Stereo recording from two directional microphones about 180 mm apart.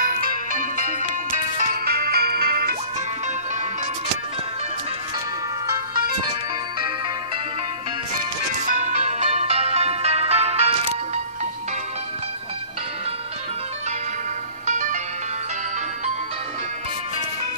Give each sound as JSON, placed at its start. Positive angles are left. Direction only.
{"t": 0.0, "sound": "music", "side_deg": -50}
{"t": 1.9, "sound": "music", "side_deg": -60}
{"t": 8.8, "sound": "music", "side_deg": -40}
{"t": 14.7, "sound": "music", "side_deg": -45}